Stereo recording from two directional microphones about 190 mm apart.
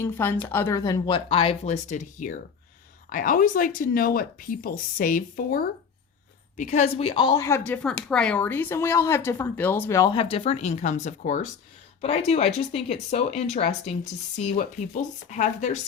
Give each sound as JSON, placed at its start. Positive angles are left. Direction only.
{"t": 0.0, "sound": "a woman's voice", "side_deg": 10}